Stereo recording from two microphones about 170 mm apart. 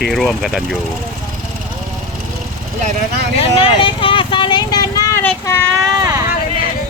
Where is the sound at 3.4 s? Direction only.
30° left (ahead or behind); by 5.7 s 10° left (ahead or behind).